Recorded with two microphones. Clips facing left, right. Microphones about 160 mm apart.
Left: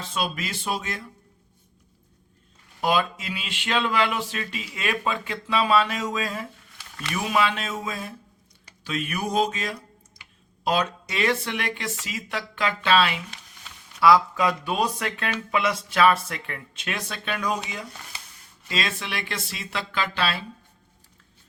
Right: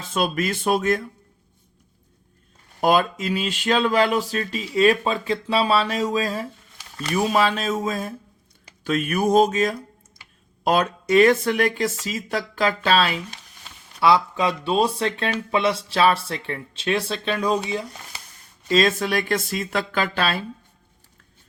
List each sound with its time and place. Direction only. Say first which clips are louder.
0.1 s speech: right 7 dB; 50° right (ahead or behind)
2.8 s speech: right 5 dB; 45° right (ahead or behind)
14.0 s speech: even; 25° right (ahead or behind)
18.7 s speech: right 10 dB; 40° right (ahead or behind)